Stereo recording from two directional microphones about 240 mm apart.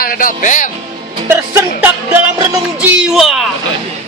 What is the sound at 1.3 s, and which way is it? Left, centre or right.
Music, centre.